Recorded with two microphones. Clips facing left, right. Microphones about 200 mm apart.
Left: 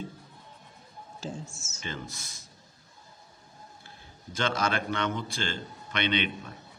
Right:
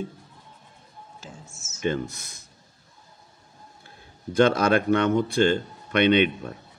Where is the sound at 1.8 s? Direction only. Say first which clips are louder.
Right 12 dB; 55° right (ahead or behind).